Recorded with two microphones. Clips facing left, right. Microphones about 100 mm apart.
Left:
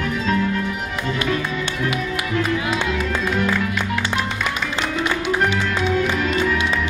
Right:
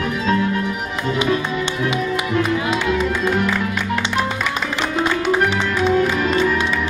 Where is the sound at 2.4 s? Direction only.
20° right (ahead or behind).